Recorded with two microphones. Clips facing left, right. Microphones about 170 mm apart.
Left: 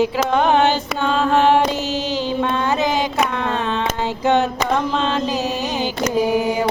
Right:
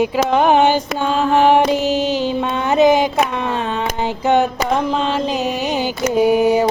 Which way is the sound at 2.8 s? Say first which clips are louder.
Right 8 dB; 20° right (ahead or behind).